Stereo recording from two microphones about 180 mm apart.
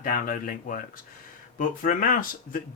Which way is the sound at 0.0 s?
50° left (ahead or behind).